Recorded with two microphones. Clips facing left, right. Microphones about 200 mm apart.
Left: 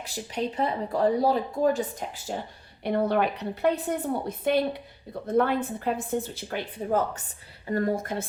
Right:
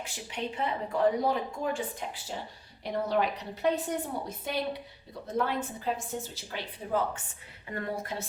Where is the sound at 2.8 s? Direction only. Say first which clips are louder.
Left 5 dB; 60° left (ahead or behind).